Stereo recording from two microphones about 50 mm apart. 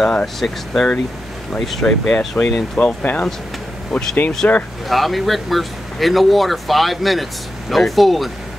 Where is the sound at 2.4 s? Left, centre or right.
Left.